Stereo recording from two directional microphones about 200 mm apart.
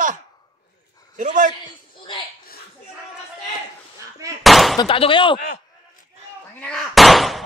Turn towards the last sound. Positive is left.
turn(degrees=0)  # may be behind; listen again after turning